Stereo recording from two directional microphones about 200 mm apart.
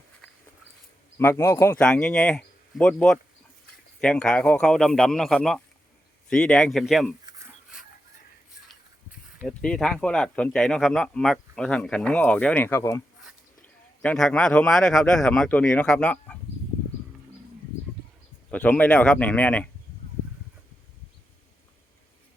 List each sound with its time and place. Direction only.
1.2 s speech: 10° left (ahead or behind)
7.3 s a sound: 15° right (ahead or behind)
9.4 s a man's voice: 5° left (ahead or behind)
18.5 s a man's voice: 5° left (ahead or behind)